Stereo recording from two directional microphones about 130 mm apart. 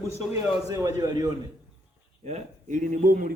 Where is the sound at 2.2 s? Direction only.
65° right (ahead or behind); by 3.3 s 90° right.